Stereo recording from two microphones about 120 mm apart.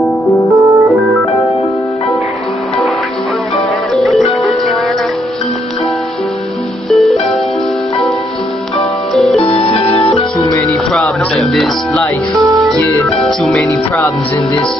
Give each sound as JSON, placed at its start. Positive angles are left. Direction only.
{"t": 0.5, "sound": "music", "side_deg": -25}
{"t": 3.9, "sound": "music", "side_deg": 0}
{"t": 6.9, "sound": "music", "side_deg": 0}
{"t": 8.7, "sound": "music", "side_deg": 0}
{"t": 9.4, "sound": "music", "side_deg": 60}
{"t": 10.9, "sound": "music", "side_deg": 5}
{"t": 12.4, "sound": "music", "side_deg": -30}
{"t": 13.2, "sound": "speech", "side_deg": 5}